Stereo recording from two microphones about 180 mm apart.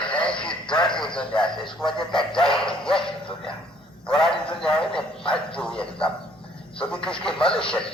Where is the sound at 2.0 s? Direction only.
25° left (ahead or behind).